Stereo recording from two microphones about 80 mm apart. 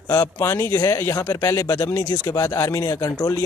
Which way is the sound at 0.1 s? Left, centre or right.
Left.